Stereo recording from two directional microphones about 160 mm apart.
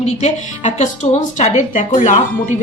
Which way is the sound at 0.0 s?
45° left (ahead or behind).